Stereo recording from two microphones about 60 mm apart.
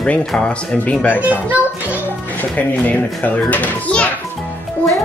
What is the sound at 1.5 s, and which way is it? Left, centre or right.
Music, right.